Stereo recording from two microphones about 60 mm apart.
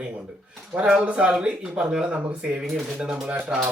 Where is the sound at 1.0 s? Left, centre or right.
Centre.